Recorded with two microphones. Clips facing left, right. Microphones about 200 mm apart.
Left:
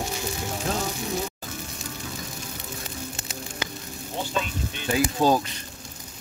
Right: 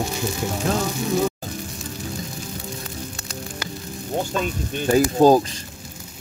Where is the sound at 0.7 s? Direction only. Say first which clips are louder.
Right 6 dB; 90° right.